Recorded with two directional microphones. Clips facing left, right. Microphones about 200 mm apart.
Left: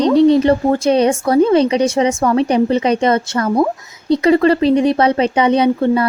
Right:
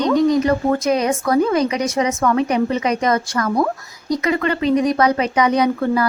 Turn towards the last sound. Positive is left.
turn(degrees=25)  # may be behind; listen again after turning